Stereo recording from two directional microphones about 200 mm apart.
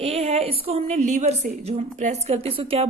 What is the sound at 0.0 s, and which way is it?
A woman's voice, 30° right (ahead or behind).